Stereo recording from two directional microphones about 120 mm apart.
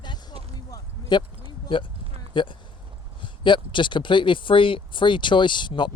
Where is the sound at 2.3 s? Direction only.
40° left (ahead or behind).